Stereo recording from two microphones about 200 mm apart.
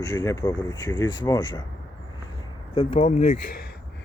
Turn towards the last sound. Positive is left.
turn(degrees=35)  # may be behind; listen again after turning